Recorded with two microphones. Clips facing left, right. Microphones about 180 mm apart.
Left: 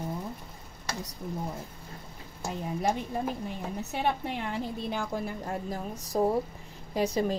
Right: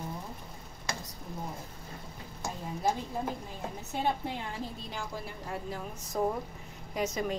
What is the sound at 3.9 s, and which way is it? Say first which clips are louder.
A woman's voice: left 1 dB; 65° left (ahead or behind).